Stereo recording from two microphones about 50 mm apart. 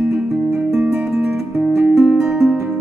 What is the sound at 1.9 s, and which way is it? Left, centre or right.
Music, centre.